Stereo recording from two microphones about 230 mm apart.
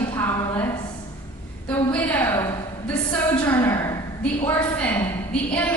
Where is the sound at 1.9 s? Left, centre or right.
Centre.